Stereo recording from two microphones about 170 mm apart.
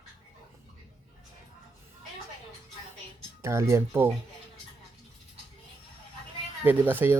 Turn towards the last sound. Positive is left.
turn(degrees=-10)  # may be behind; listen again after turning